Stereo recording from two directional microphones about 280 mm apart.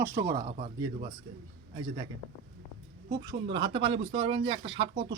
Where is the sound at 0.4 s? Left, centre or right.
Centre.